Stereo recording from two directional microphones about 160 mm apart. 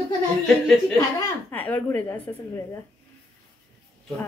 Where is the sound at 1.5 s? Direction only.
10° left (ahead or behind).